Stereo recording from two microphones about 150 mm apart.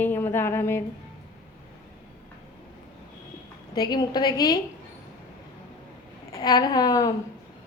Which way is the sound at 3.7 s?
25° left (ahead or behind).